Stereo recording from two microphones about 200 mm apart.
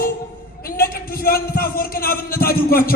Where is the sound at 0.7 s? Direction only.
50° left (ahead or behind).